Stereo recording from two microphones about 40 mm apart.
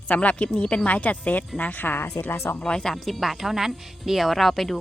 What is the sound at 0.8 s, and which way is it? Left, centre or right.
Speech, left.